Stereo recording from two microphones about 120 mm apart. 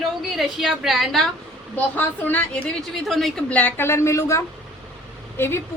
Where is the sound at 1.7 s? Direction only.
15° left (ahead or behind).